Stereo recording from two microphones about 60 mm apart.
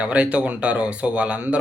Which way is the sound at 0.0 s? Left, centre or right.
Centre.